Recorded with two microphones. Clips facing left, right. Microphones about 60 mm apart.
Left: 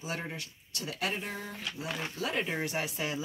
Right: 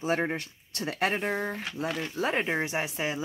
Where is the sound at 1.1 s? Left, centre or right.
Right.